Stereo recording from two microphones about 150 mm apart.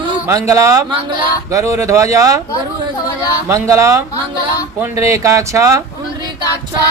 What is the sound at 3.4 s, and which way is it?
Speech, 20° right (ahead or behind).